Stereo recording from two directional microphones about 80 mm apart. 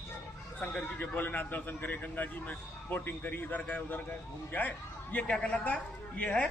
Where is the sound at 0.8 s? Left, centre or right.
Left.